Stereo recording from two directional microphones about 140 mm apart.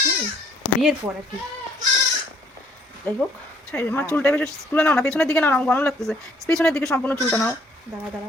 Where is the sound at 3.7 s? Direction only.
15° left (ahead or behind).